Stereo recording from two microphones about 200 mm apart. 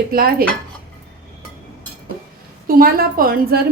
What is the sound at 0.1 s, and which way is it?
Speech, 50° right (ahead or behind).